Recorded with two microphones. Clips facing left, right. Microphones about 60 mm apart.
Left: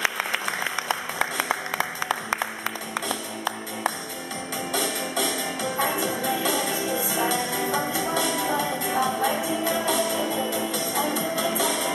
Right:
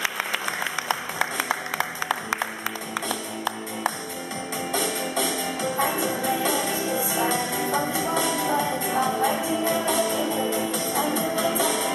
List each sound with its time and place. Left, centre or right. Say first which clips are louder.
0.8 s music: even; centre